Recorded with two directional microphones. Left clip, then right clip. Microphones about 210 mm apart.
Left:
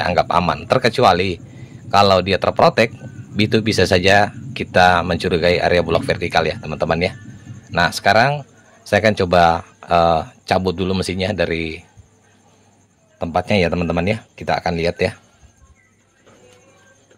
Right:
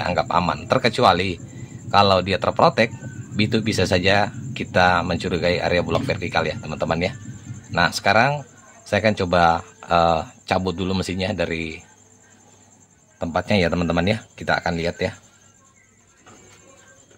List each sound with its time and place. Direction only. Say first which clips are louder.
0.0 s speech: left 4 dB; 20° left (ahead or behind)
13.2 s speech: left 3 dB; 15° left (ahead or behind)